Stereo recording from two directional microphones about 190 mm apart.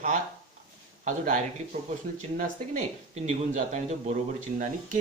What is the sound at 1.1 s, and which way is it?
Speech, 35° right (ahead or behind).